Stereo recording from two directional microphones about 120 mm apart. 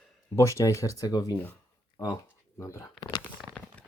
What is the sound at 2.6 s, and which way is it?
Speech, 25° left (ahead or behind).